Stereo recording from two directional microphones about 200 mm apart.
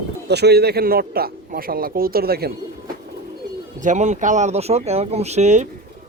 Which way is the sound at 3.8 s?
35° right (ahead or behind).